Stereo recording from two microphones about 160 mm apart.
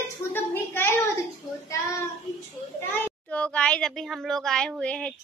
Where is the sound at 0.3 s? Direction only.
15° left (ahead or behind).